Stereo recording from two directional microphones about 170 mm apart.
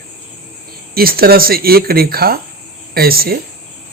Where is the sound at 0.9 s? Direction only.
60° right (ahead or behind).